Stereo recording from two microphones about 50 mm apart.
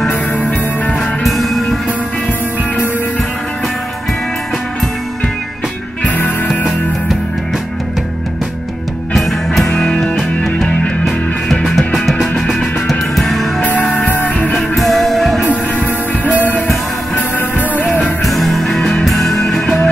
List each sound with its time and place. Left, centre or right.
0.1 s music: left
1.2 s music: centre
6.0 s music: left
9.1 s music: centre
9.7 s music: centre
10.1 s music: centre
13.7 s music: left
14.8 s music: centre
18.2 s music: centre